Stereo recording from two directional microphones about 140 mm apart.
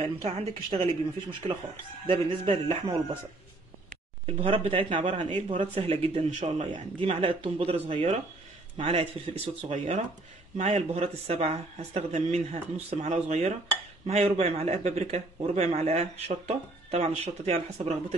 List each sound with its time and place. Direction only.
0.2 s speech: 45° right (ahead or behind)
2.0 s speech: 40° right (ahead or behind)
4.3 s speech: 45° right (ahead or behind)
5.1 s speech: 60° right (ahead or behind)
5.8 s speech: 40° right (ahead or behind)
6.3 s speech: 55° right (ahead or behind)
7.0 s speech: 45° right (ahead or behind)